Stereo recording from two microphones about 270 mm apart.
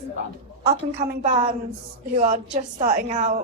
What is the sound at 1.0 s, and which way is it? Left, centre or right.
A woman's voice, right.